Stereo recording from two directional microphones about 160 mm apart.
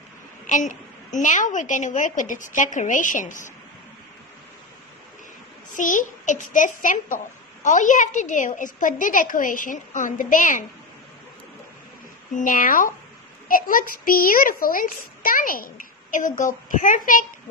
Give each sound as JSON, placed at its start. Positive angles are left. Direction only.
{"t": 0.5, "sound": "a woman's voice", "side_deg": 50}
{"t": 5.8, "sound": "a woman's voice", "side_deg": 50}
{"t": 12.4, "sound": "a child's voice", "side_deg": 55}